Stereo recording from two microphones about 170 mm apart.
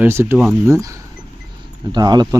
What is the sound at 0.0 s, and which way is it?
Speech, 15° right (ahead or behind).